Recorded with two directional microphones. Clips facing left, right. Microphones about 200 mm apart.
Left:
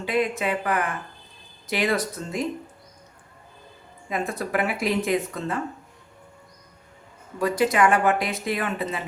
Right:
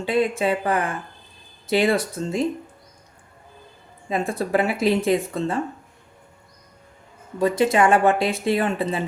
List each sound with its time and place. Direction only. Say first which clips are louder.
0.0 s speech: right 3 dB; 30° right (ahead or behind)
4.1 s speech: right 4 dB; 30° right (ahead or behind)
7.3 s speech: right 3 dB; 25° right (ahead or behind)